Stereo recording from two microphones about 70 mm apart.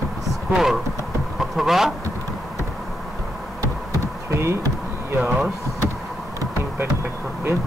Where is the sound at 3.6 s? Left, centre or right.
Right.